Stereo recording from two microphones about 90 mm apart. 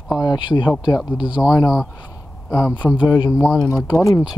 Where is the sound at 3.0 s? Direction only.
55° left (ahead or behind).